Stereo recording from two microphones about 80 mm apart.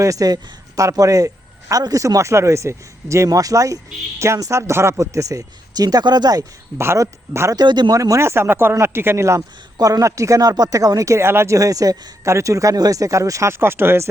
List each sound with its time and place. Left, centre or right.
0.0 s speech: right
3.2 s speech: right
6.7 s speech: right
7.5 s speech: right
7.9 s speech: right
9.7 s speech: right